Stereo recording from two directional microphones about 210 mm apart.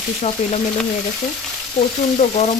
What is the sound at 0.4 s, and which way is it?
Frying, 35° left (ahead or behind).